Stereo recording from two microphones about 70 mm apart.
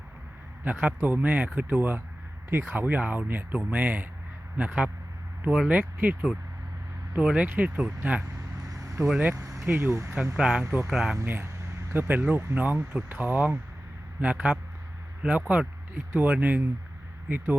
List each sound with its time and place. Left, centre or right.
0.6 s speech: right
7.2 s speech: centre
7.4 s speech: right
8.7 s vehicle: right
9.6 s speech: right
10.3 s speech: centre
11.3 s a sound: right
12.3 s speech: right